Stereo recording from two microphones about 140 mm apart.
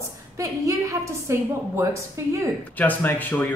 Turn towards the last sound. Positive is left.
turn(degrees=15)  # may be behind; listen again after turning